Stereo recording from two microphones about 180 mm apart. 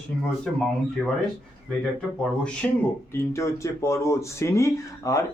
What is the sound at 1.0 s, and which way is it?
Speech, 5° right (ahead or behind).